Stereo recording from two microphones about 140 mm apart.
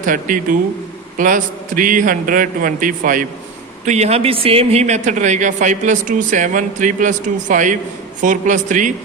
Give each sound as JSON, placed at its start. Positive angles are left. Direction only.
{"t": 0.0, "sound": "a man's voice", "side_deg": -75}
{"t": 3.8, "sound": "a man's voice", "side_deg": -50}